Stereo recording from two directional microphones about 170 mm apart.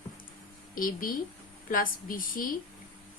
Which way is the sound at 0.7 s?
55° left (ahead or behind).